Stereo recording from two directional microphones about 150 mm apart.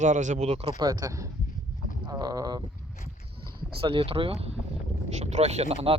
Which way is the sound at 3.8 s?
35° right (ahead or behind).